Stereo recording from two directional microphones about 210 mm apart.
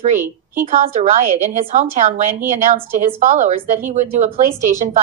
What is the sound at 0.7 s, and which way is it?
A woman's voice, 35° right (ahead or behind).